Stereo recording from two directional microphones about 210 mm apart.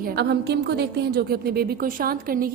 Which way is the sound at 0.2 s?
50° right (ahead or behind).